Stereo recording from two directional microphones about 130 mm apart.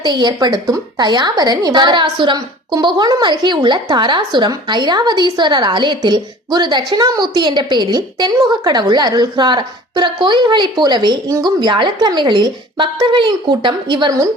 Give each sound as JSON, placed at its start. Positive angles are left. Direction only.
{"t": 0.0, "sound": "a woman's voice", "side_deg": -35}